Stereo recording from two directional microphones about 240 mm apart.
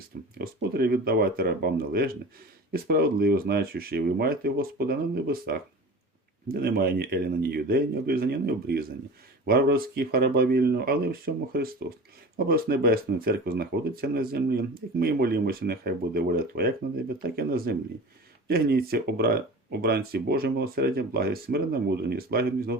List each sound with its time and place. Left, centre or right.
0.3 s speech: right